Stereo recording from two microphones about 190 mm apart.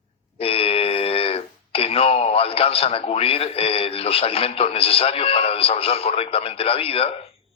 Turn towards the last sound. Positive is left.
turn(degrees=30)  # may be behind; listen again after turning